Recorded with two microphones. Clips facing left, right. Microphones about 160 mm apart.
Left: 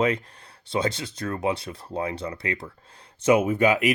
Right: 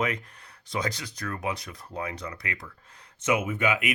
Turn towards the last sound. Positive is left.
turn(degrees=35)  # may be behind; listen again after turning